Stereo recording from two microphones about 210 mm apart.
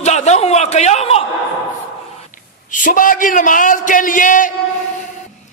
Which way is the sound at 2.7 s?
40° left (ahead or behind).